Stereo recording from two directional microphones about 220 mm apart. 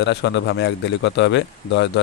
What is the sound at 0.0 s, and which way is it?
A man's voice, 50° left (ahead or behind).